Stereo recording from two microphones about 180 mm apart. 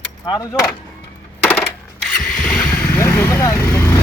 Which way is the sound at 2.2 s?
5° left (ahead or behind).